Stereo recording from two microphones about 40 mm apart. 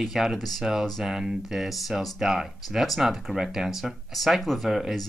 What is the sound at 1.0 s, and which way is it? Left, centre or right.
Speech, centre.